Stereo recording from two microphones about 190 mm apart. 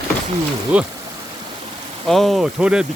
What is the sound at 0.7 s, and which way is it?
Speech, 5° right (ahead or behind).